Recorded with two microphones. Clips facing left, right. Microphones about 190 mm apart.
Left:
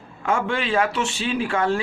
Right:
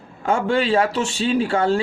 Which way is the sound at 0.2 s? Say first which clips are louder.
Right 4 dB; 35° right (ahead or behind).